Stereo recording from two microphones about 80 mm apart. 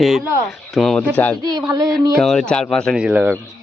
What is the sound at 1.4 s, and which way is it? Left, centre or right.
Speech, right.